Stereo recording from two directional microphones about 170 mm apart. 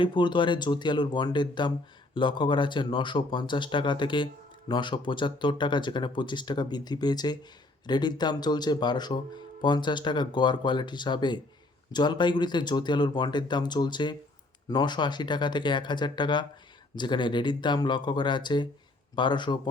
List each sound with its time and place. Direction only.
0.0 s speech: 30° left (ahead or behind)